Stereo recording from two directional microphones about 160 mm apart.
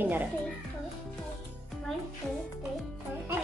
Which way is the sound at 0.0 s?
10° right (ahead or behind).